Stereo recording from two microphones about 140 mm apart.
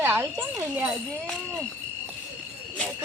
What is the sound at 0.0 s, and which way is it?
Speech, 15° right (ahead or behind).